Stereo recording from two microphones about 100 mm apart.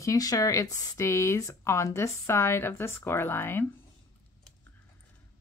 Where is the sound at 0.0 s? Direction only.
35° left (ahead or behind).